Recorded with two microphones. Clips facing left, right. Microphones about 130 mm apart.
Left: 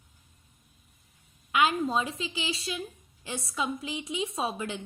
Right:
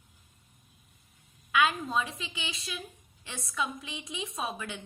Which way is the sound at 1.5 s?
25° left (ahead or behind).